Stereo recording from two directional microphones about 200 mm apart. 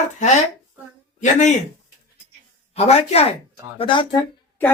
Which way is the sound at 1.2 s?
35° left (ahead or behind).